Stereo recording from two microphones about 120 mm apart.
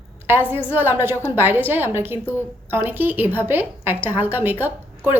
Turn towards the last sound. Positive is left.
turn(degrees=-15)  # may be behind; listen again after turning